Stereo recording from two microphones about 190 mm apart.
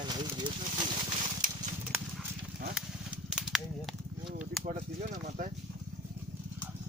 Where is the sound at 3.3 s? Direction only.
5° right (ahead or behind).